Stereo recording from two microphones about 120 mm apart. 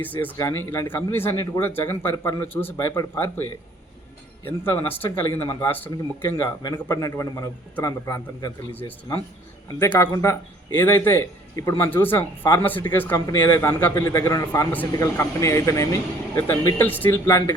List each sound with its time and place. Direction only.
0.0 s speech: 15° left (ahead or behind)
0.3 s a man's voice: 25° left (ahead or behind)
2.7 s a man's voice: 30° left (ahead or behind)
5.0 s a man's voice: 20° left (ahead or behind)
9.9 s a man's voice: 20° left (ahead or behind)
13.1 s a man's voice: 30° left (ahead or behind)
14.7 s a man's voice: 15° left (ahead or behind)